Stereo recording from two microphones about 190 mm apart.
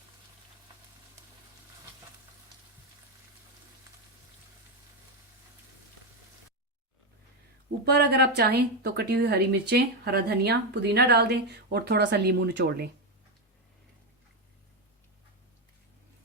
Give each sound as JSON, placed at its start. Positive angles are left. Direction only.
{"t": 7.9, "sound": "a woman's voice", "side_deg": -55}